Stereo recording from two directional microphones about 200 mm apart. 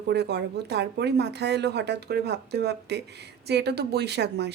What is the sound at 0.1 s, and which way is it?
A woman's voice, 55° right (ahead or behind).